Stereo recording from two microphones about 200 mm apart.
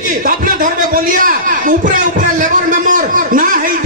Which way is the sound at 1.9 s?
40° right (ahead or behind).